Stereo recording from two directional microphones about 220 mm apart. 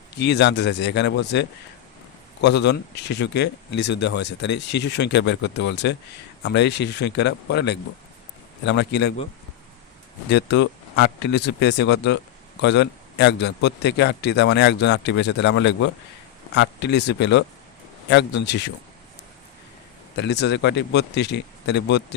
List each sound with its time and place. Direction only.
0.2 s speech: 50° left (ahead or behind)
10.2 s speech: 50° left (ahead or behind)
20.1 s speech: 50° left (ahead or behind)